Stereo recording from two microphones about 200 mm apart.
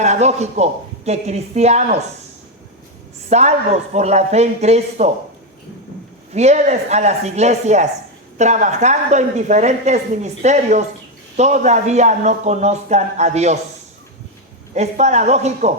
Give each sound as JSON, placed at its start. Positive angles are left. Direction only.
{"t": 0.0, "sound": "a woman's voice", "side_deg": -35}
{"t": 3.2, "sound": "a woman's voice", "side_deg": -35}
{"t": 6.3, "sound": "a woman's voice", "side_deg": -35}
{"t": 14.8, "sound": "a woman's voice", "side_deg": -35}